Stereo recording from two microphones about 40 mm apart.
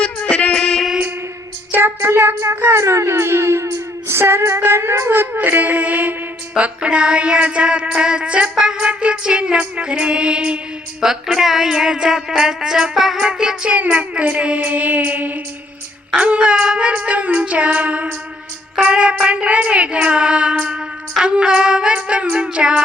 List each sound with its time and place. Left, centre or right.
0.0 s music: left
1.7 s child singing: right
3.1 s a sound: right
4.1 s female singing: right
5.5 s a sound: right
6.6 s music: right
8.5 s music: centre
8.8 s music: right
11.0 s speech: centre
13.1 s music: right
13.9 s music: right
16.1 s music: right
16.9 s music: right